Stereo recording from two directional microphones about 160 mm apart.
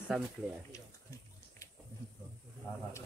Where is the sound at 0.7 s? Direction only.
20° left (ahead or behind).